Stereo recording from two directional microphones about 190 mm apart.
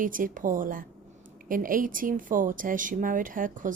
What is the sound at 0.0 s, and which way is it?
Speech, 45° right (ahead or behind).